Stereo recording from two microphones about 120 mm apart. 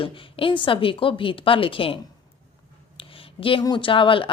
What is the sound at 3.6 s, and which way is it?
Speech, 45° left (ahead or behind).